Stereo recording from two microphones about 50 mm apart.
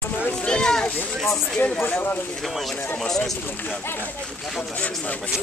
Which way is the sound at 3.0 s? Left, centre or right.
Centre.